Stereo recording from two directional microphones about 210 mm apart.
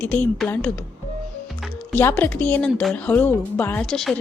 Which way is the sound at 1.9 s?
10° left (ahead or behind).